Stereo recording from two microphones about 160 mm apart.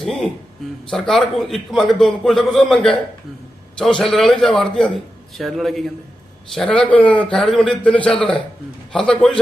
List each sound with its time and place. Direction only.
0.0 s music: 5° left (ahead or behind)
0.9 s a man's voice: 5° left (ahead or behind)